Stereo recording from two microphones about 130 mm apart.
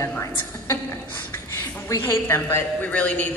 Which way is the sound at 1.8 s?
20° left (ahead or behind).